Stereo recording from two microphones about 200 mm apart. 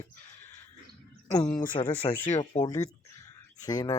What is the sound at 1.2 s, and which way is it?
Speech, 10° left (ahead or behind).